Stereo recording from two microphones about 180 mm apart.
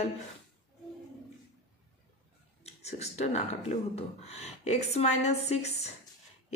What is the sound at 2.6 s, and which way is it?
Speech, 35° left (ahead or behind).